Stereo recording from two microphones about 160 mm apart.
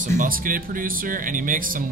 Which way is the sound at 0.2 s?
60° right (ahead or behind).